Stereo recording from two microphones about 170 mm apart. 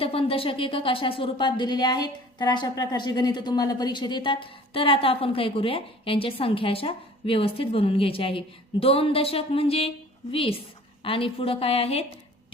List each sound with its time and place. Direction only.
0.0 s speech: 35° left (ahead or behind)